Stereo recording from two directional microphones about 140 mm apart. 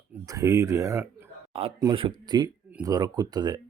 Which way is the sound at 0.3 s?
25° right (ahead or behind).